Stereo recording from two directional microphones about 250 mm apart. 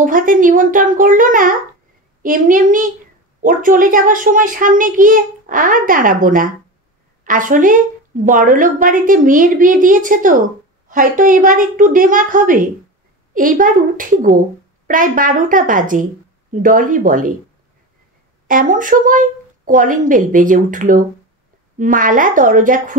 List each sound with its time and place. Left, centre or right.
0.0 s a child's voice: right
18.5 s a child's voice: right